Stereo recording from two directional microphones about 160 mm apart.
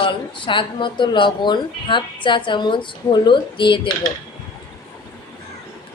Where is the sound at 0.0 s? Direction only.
30° left (ahead or behind).